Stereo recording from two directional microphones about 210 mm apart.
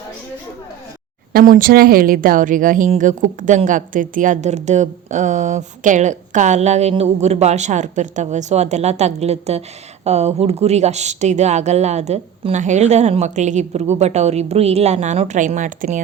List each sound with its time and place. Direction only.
1.3 s speech: 45° right (ahead or behind)